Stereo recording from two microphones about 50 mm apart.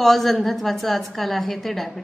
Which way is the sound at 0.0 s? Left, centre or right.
Centre.